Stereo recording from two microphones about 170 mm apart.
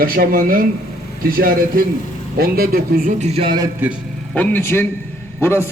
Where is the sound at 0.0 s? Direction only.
60° right (ahead or behind); by 3.7 s 30° right (ahead or behind).